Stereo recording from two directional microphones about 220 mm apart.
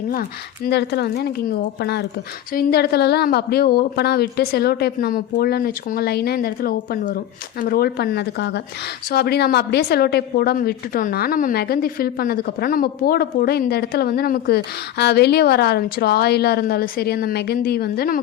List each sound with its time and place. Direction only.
0.1 s a woman's voice: 40° left (ahead or behind)